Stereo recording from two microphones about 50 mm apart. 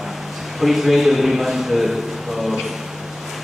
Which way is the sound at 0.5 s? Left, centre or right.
Centre.